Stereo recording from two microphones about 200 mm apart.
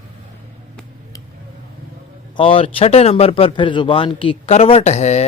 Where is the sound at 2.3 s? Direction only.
25° left (ahead or behind).